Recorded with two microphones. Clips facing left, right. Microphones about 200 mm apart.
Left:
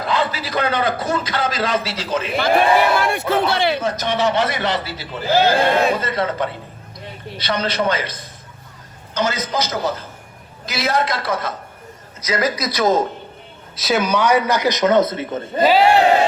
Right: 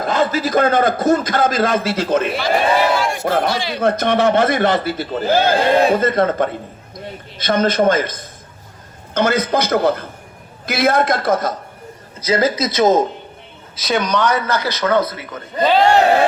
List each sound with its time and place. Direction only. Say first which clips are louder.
0.0 s a man's voice: right 4 dB; 45° right (ahead or behind)
2.3 s speech: left 1 dB; 55° left (ahead or behind)
3.2 s a man's voice: right 4 dB; 55° right (ahead or behind)
3.5 s speech: left 4 dB; 60° left (ahead or behind)
3.8 s a man's voice: right 5 dB; 55° right (ahead or behind)
12.2 s a man's voice: right 4 dB; 30° right (ahead or behind)
13.7 s a man's voice: even; centre (ahead or behind); by 15.6 s 25° left (ahead or behind)
15.6 s a man's voice: even; 5° left (ahead or behind)